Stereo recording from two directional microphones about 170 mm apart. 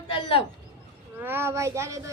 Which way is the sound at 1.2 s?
15° right (ahead or behind).